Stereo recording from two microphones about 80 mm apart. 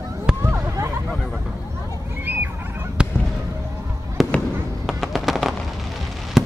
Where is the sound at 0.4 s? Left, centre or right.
Right.